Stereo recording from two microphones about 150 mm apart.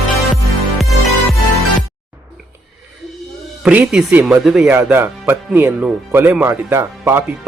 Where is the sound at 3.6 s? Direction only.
10° right (ahead or behind).